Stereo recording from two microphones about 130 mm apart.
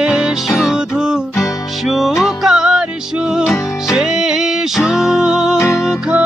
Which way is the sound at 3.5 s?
25° left (ahead or behind).